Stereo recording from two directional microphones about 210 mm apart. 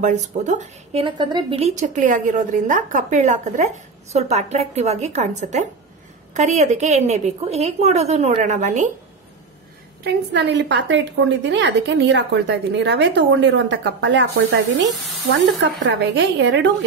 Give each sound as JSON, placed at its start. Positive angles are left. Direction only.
{"t": 0.0, "sound": "speech", "side_deg": -35}
{"t": 10.0, "sound": "a woman's voice", "side_deg": -55}
{"t": 15.3, "sound": "a woman's voice", "side_deg": -60}